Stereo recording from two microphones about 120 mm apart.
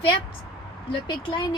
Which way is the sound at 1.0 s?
45° left (ahead or behind).